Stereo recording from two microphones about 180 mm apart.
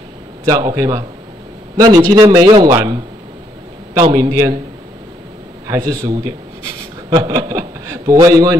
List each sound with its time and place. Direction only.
0.5 s a man's voice: 20° right (ahead or behind)
5.7 s a man's voice: 15° right (ahead or behind)